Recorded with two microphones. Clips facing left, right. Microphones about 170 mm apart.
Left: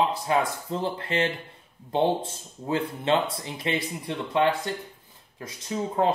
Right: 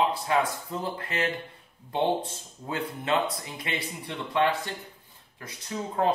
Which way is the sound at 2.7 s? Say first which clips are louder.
Left 4 dB; 30° left (ahead or behind).